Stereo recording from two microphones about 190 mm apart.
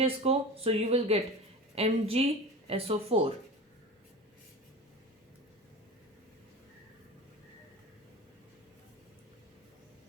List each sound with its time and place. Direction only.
0.0 s speech: 30° right (ahead or behind)